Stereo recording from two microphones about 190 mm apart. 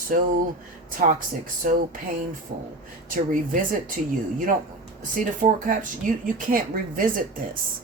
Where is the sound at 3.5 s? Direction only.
45° right (ahead or behind).